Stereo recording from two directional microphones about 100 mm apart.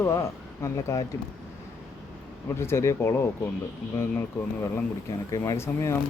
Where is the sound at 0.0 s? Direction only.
30° left (ahead or behind).